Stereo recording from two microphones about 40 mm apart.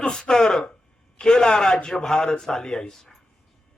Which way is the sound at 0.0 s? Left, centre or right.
Centre.